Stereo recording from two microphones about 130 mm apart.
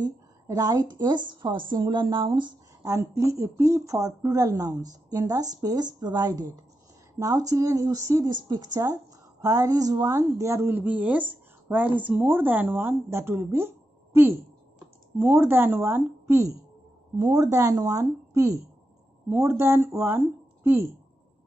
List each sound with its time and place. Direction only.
0.0 s a woman's voice: 30° right (ahead or behind)
2.8 s speech: 25° right (ahead or behind)